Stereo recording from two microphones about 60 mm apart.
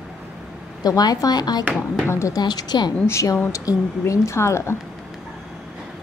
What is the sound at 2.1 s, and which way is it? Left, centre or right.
Speech, left.